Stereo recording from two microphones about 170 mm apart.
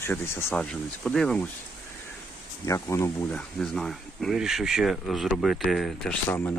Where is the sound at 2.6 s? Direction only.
15° left (ahead or behind).